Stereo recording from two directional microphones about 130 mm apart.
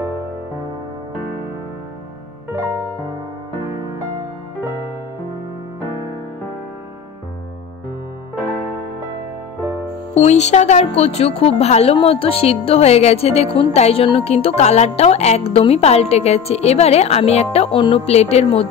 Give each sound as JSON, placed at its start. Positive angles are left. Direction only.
{"t": 10.1, "sound": "a woman's voice", "side_deg": 55}